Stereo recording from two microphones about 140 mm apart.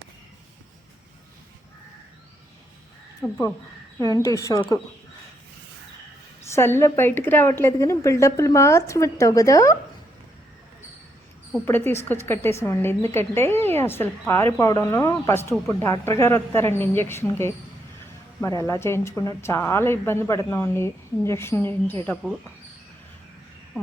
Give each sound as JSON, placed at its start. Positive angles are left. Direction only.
{"t": 3.2, "sound": "a woman's voice", "side_deg": 20}
{"t": 6.4, "sound": "a woman's voice", "side_deg": 20}
{"t": 11.6, "sound": "a woman's voice", "side_deg": 15}
{"t": 23.7, "sound": "a sound", "side_deg": 0}